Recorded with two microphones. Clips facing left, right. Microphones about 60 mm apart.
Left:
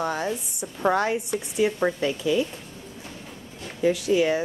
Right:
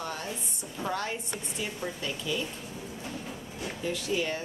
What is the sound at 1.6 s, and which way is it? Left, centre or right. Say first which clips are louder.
Speech: left 13 dB; left.